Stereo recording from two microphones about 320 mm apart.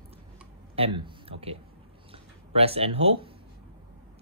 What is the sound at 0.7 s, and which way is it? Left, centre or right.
Speech, centre.